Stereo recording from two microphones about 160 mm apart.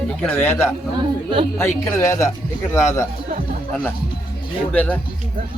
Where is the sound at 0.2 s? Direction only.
10° left (ahead or behind).